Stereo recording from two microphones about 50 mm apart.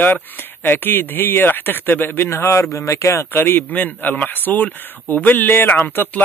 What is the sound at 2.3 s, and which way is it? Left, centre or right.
Speech, left.